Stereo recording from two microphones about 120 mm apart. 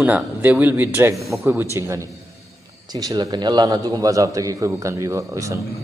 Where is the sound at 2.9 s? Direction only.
35° right (ahead or behind).